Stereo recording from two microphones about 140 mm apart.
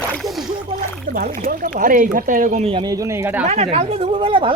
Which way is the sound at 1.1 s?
80° right.